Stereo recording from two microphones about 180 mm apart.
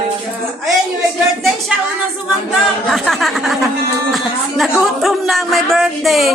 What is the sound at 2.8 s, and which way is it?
Speech, centre (ahead or behind).